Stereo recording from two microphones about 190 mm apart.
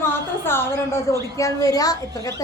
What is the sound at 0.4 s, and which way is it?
A woman's voice, 10° left (ahead or behind).